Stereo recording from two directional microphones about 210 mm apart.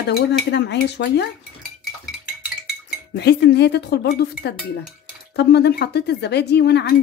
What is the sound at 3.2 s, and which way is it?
A woman's voice, 50° left (ahead or behind).